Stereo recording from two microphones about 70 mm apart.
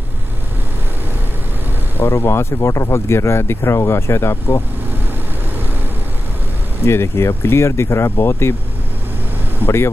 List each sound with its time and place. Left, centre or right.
2.0 s speech: left
6.9 s speech: left